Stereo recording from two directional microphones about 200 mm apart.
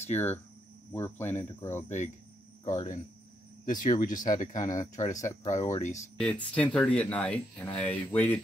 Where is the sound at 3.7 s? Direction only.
40° left (ahead or behind).